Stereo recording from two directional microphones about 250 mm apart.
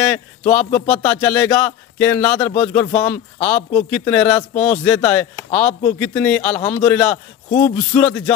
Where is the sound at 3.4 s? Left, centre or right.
Left.